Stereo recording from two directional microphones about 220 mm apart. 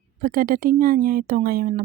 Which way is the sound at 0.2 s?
40° right (ahead or behind).